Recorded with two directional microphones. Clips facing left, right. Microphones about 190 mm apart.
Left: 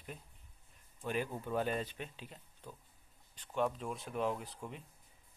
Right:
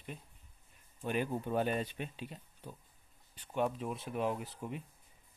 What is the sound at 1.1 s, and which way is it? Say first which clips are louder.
Speech: right 3 dB; 20° right (ahead or behind).